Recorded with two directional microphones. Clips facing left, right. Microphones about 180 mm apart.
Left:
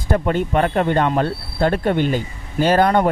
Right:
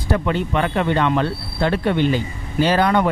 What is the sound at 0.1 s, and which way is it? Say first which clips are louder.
Speech: left 2 dB; 45° left (ahead or behind).